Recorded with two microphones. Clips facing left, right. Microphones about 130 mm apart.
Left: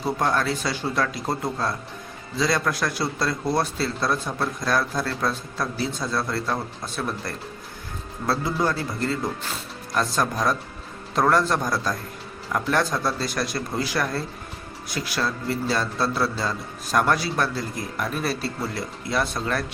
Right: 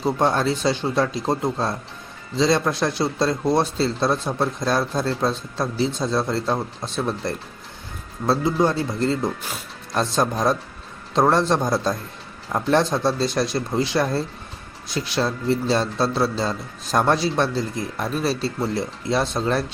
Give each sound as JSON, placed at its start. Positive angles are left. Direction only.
{"t": 0.0, "sound": "speech", "side_deg": -25}